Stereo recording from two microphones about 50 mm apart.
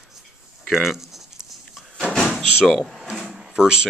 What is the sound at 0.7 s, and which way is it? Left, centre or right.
Speech, centre.